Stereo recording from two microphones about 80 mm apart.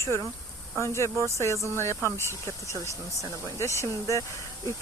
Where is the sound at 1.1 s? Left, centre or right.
Right.